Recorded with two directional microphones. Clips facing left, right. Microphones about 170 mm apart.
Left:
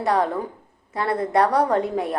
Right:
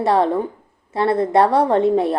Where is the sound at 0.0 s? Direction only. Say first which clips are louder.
Right 5 dB; 25° right (ahead or behind).